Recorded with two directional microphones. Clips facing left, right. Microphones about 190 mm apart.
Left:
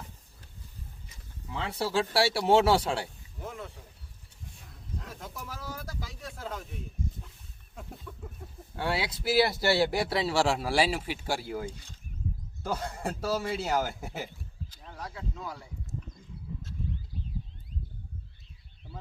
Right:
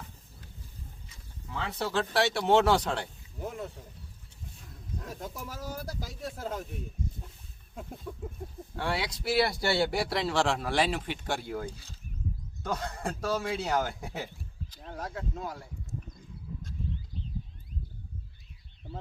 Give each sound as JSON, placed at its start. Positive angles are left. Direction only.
{"t": 1.6, "sound": "speech", "side_deg": 10}
{"t": 5.0, "sound": "speech", "side_deg": -45}
{"t": 8.1, "sound": "a sound", "side_deg": -35}
{"t": 8.8, "sound": "speech", "side_deg": 5}
{"t": 14.8, "sound": "speech", "side_deg": -50}